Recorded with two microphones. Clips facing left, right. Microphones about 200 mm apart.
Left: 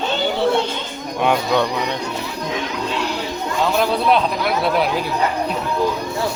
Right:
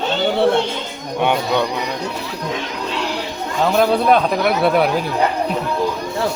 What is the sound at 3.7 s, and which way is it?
Speech, 50° right (ahead or behind).